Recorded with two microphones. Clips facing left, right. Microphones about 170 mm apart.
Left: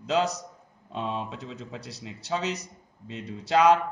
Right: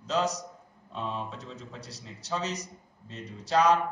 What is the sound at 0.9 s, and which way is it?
Speech, 75° left (ahead or behind).